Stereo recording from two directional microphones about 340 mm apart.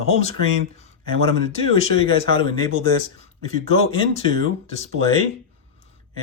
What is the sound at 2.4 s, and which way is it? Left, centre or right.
Speech, centre.